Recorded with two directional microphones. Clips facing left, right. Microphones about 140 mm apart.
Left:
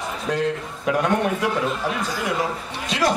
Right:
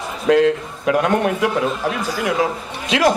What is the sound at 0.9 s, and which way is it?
Speech, 75° right (ahead or behind).